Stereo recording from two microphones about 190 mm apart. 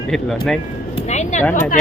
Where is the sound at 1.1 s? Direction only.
40° left (ahead or behind).